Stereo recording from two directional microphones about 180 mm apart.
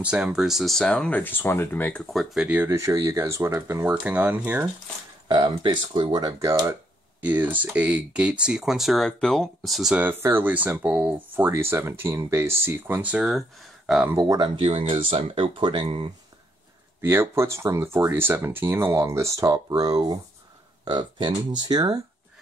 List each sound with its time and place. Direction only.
0.0 s speech: 5° right (ahead or behind)
5.3 s speech: 25° right (ahead or behind)
7.2 s speech: 10° right (ahead or behind)
14.2 s speech: 25° right (ahead or behind)
17.0 s speech: 15° right (ahead or behind)